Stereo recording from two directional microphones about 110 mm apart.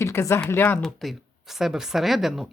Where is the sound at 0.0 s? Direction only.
25° left (ahead or behind).